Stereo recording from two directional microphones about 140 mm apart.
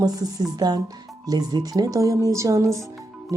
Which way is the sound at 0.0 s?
25° right (ahead or behind).